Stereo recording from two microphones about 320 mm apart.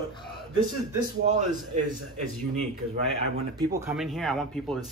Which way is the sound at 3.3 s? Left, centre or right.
Centre.